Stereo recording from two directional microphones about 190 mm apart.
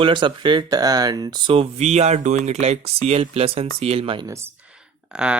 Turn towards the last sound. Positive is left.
turn(degrees=-5)  # may be behind; listen again after turning